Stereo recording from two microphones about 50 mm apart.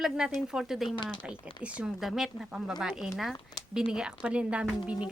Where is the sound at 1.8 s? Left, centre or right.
Centre.